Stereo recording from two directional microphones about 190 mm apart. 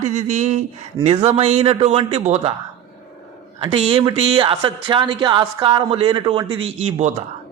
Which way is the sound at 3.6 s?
30° right (ahead or behind).